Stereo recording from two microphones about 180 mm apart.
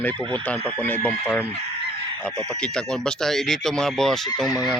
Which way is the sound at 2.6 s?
5° left (ahead or behind).